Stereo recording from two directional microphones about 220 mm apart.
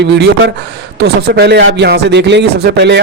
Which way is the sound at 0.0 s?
50° right (ahead or behind).